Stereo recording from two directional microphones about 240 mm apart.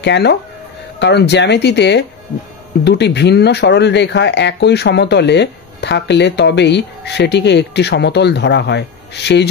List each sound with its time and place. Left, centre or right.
0.0 s speech: left